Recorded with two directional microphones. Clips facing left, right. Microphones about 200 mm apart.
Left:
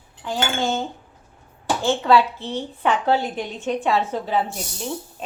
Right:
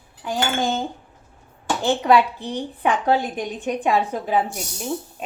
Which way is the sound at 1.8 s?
15° right (ahead or behind).